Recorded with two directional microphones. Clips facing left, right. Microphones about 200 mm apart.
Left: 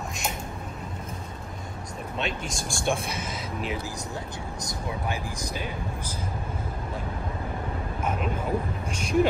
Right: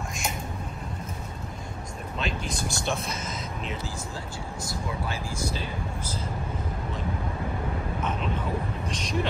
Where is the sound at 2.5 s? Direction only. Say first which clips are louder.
Left 2 dB; 50° left (ahead or behind).